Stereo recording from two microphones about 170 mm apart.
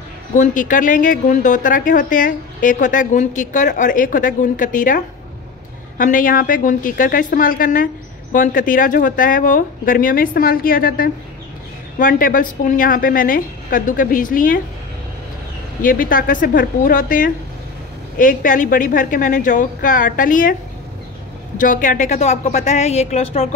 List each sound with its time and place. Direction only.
0.4 s a woman's voice: 50° left (ahead or behind)
15.8 s a woman's voice: 55° left (ahead or behind)
21.5 s a woman's voice: 50° left (ahead or behind)